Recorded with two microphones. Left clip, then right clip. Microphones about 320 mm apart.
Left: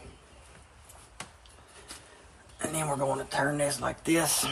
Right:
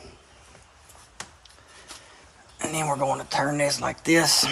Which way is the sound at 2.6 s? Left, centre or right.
Right.